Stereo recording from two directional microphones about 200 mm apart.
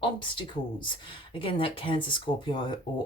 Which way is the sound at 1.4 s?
25° left (ahead or behind).